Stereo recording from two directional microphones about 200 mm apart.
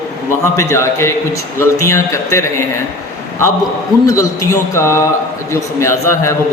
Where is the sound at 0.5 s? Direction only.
15° left (ahead or behind).